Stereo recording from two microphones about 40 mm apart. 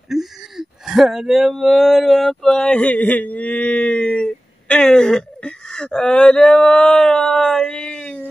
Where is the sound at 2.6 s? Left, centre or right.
Left.